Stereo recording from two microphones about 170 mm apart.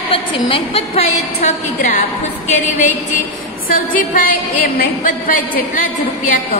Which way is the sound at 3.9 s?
55° left (ahead or behind).